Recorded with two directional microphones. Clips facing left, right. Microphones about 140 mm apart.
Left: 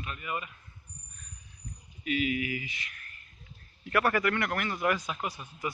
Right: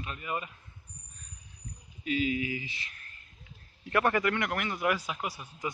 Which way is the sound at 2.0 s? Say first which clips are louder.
Even; 30° right (ahead or behind).